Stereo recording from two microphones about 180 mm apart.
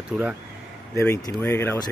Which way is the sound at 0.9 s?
15° left (ahead or behind).